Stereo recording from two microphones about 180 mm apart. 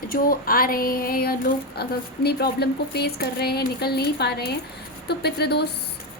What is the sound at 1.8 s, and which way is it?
A woman's voice, 60° left (ahead or behind).